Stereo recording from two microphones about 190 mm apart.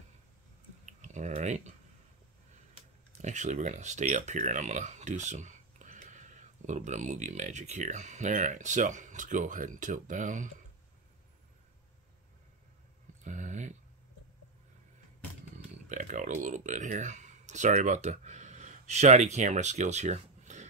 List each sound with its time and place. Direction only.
0.8 s clicking: 40° right (ahead or behind)
3.2 s speech: 40° right (ahead or behind)
13.2 s a sound: 40° right (ahead or behind)
15.9 s speech: 40° right (ahead or behind)